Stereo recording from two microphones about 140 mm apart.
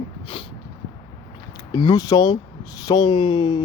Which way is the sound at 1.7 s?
30° left (ahead or behind).